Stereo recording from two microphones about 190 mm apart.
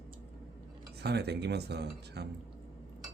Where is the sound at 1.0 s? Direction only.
60° right (ahead or behind).